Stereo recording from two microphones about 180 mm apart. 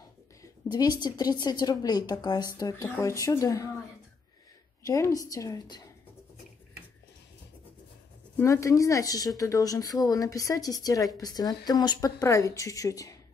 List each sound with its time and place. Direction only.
0.4 s speech: 20° left (ahead or behind)
4.8 s speech: 15° left (ahead or behind)
8.4 s speech: 15° left (ahead or behind)